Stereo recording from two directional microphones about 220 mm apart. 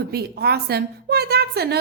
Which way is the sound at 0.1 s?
45° right (ahead or behind).